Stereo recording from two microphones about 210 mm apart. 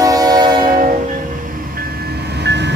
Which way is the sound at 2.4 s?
55° right (ahead or behind).